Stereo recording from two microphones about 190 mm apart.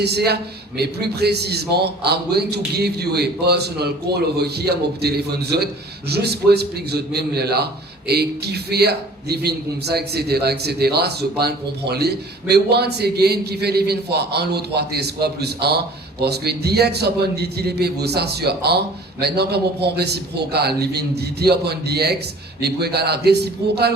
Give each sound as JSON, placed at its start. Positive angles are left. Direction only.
{"t": 0.0, "sound": "a man's voice", "side_deg": -60}